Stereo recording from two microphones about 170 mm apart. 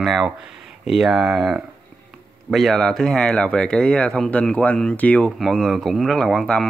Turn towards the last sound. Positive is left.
turn(degrees=5)  # may be behind; listen again after turning